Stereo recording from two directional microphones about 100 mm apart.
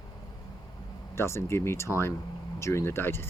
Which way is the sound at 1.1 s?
25° left (ahead or behind).